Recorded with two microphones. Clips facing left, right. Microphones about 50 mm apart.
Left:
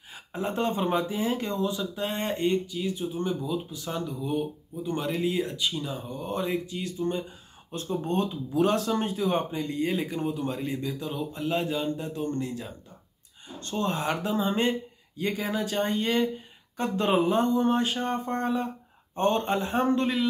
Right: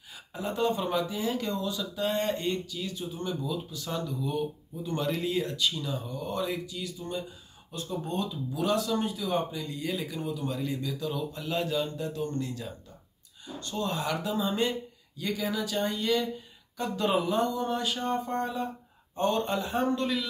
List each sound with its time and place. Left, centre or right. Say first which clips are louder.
0.1 s speech: left 3 dB; left